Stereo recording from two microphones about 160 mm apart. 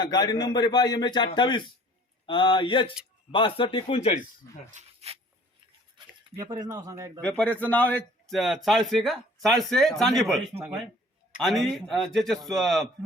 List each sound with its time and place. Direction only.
0.0 s a man's voice: 25° left (ahead or behind)
4.7 s speech: 45° right (ahead or behind)
6.3 s speech: 25° right (ahead or behind)
7.2 s a man's voice: 10° left (ahead or behind)
11.4 s a man's voice: centre (ahead or behind)